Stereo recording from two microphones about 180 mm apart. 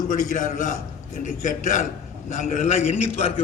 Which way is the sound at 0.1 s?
45° left (ahead or behind).